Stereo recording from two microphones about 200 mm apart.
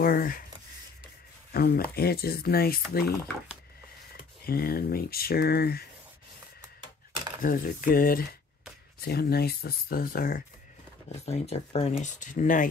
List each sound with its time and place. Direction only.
0.0 s speech: 45° left (ahead or behind)
1.5 s speech: 50° left (ahead or behind)
4.5 s speech: 50° left (ahead or behind)
7.4 s speech: 45° left (ahead or behind)
11.1 s speech: 30° left (ahead or behind)